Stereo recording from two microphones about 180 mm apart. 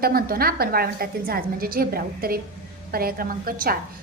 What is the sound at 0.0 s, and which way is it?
A woman's voice, 55° right (ahead or behind).